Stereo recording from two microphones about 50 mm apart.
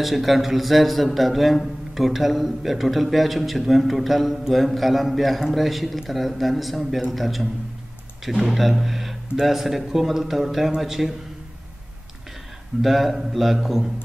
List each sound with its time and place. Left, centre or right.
0.0 s a man's voice: centre
12.8 s a man's voice: centre